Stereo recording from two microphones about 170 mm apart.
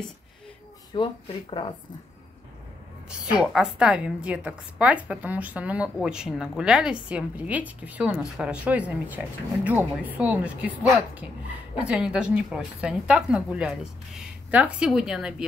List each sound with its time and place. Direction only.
0.9 s speech: 30° left (ahead or behind)
3.1 s a woman's voice: 5° right (ahead or behind)